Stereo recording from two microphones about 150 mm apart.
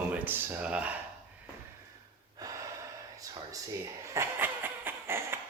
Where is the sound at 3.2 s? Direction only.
25° right (ahead or behind).